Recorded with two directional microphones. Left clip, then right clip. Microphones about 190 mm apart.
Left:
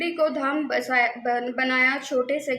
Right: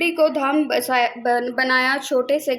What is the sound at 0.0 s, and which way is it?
A woman's voice, 30° right (ahead or behind).